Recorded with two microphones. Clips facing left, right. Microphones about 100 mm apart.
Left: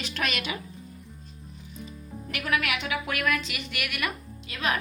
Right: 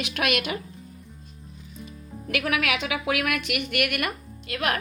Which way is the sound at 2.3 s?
90° right.